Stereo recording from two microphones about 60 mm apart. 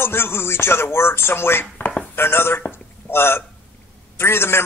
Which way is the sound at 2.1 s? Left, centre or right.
Left.